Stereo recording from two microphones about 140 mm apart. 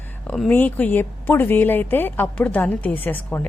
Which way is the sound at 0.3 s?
10° left (ahead or behind).